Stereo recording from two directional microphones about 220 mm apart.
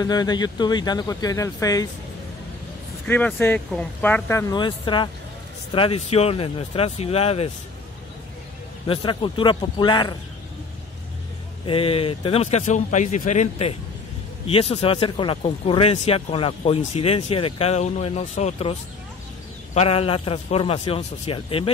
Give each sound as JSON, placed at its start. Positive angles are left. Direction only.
{"t": 0.0, "sound": "speech", "side_deg": 20}
{"t": 3.1, "sound": "speech", "side_deg": 5}
{"t": 8.8, "sound": "speech", "side_deg": 25}
{"t": 11.6, "sound": "speech", "side_deg": 25}